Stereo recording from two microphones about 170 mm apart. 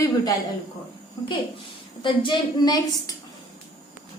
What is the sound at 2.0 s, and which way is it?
A woman's voice, 25° left (ahead or behind).